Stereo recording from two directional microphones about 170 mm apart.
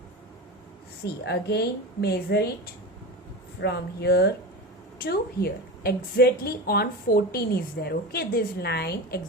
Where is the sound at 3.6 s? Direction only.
70° left (ahead or behind).